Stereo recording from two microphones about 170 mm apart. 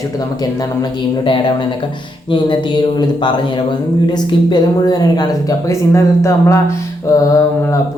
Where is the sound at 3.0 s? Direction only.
25° left (ahead or behind).